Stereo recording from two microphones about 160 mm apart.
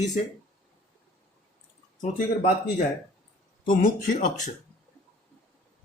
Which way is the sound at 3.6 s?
55° left (ahead or behind).